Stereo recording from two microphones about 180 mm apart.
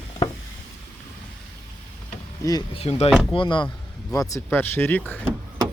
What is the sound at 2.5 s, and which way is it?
Speech, 20° left (ahead or behind).